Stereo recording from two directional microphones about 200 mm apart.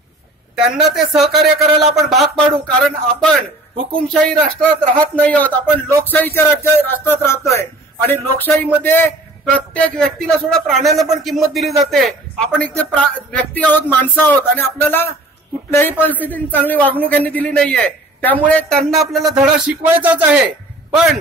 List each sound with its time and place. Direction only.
0.7 s a man's voice: centre (ahead or behind)